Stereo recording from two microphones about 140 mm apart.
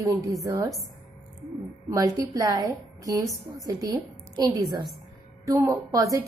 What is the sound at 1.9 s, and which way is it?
A woman's voice, 25° right (ahead or behind).